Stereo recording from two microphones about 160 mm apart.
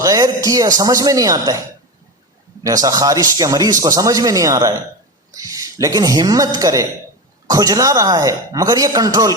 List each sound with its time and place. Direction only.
0.0 s speech: 20° right (ahead or behind)
2.6 s speech: 20° right (ahead or behind)